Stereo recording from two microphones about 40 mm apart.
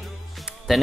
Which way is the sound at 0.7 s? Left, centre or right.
Centre.